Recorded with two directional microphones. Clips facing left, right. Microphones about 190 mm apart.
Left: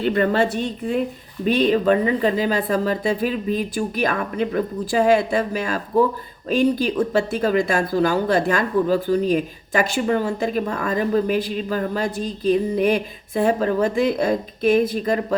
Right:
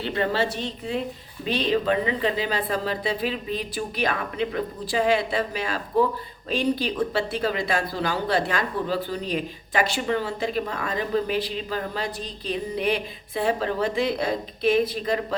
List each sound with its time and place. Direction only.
0.0 s speech: 50° left (ahead or behind)